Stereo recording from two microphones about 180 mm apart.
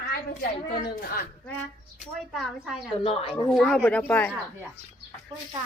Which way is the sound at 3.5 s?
Centre (ahead or behind).